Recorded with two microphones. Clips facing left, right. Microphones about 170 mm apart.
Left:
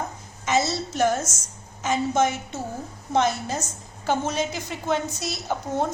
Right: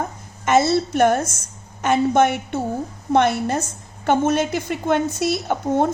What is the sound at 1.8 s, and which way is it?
A woman's voice, 60° right (ahead or behind).